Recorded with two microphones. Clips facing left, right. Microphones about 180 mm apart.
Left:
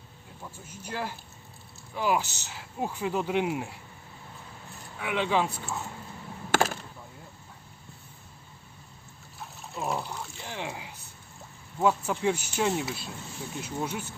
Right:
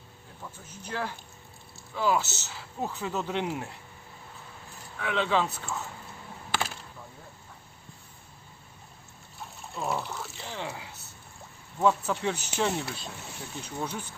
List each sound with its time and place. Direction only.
0.8 s speech: 10° left (ahead or behind)
4.9 s speech: 10° left (ahead or behind)
6.5 s a sound: 45° left (ahead or behind)
9.6 s water: centre (ahead or behind)
10.0 s speech: 15° left (ahead or behind)